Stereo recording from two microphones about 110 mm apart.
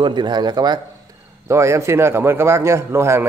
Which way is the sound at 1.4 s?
25° right (ahead or behind).